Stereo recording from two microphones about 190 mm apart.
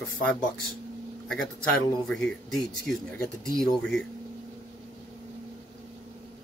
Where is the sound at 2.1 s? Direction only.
5° left (ahead or behind).